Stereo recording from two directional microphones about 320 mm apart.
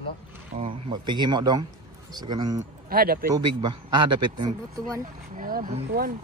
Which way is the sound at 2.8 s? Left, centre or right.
Right.